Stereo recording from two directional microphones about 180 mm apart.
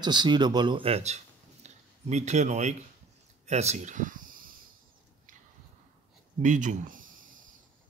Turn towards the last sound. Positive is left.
turn(degrees=-50)  # may be behind; listen again after turning